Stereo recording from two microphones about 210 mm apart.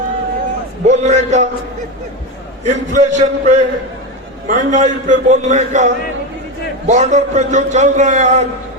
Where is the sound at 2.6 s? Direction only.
35° right (ahead or behind).